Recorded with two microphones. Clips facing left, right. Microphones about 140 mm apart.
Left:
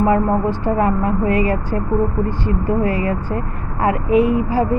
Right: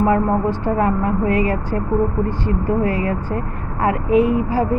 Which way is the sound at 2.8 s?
15° left (ahead or behind).